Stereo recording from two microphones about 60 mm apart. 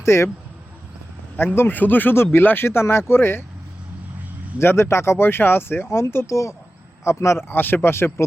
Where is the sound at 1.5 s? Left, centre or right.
Left.